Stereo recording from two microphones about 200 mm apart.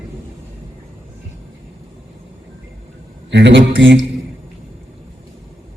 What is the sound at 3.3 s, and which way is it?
Speech, 60° right (ahead or behind).